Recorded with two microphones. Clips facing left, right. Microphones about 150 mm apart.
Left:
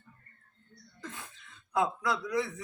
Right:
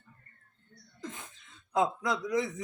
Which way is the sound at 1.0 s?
20° right (ahead or behind).